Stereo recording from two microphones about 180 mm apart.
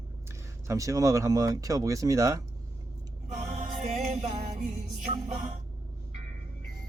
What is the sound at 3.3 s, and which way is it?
Music, 40° right (ahead or behind).